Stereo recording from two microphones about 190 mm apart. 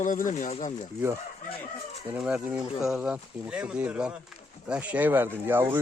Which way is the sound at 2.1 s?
5° right (ahead or behind).